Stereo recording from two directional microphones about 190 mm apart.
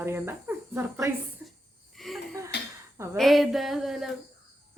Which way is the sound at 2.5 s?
60° left (ahead or behind).